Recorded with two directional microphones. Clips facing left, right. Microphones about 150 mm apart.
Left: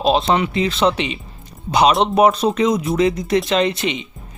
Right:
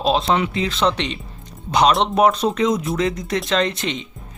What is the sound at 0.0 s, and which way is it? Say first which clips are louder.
Speech: left 2 dB; centre (ahead or behind).